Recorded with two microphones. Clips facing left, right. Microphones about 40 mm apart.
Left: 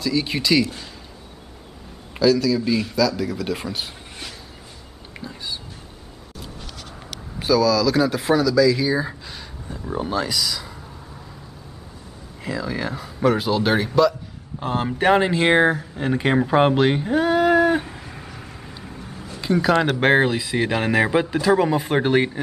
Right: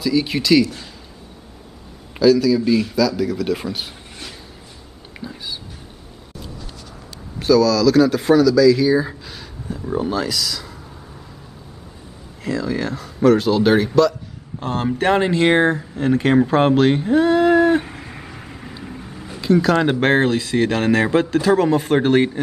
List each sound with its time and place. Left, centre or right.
0.0 s speech: centre
2.1 s speech: centre
5.2 s a sound: centre
7.3 s speech: centre
12.4 s speech: centre
17.6 s dog: centre
18.0 s a sound: right
18.4 s vehicle: centre
19.4 s speech: centre